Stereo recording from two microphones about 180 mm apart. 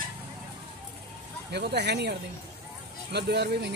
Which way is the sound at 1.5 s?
65° right (ahead or behind).